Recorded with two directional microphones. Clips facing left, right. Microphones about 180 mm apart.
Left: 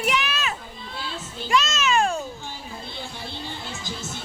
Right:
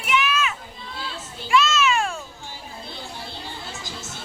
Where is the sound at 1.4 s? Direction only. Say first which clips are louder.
Right 3 dB; 40° left (ahead or behind).